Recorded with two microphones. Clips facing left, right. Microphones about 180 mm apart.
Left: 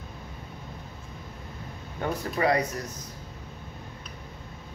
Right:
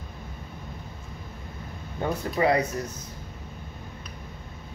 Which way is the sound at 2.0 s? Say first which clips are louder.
Right 2 dB; 30° right (ahead or behind).